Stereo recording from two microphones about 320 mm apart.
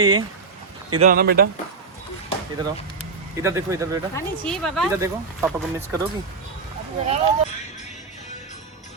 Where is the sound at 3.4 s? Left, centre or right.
Centre.